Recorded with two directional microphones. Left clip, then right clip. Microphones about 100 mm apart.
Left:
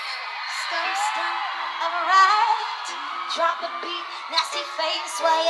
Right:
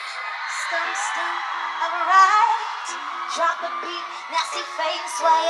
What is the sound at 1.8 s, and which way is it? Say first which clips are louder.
Music: right 2 dB; 20° left (ahead or behind).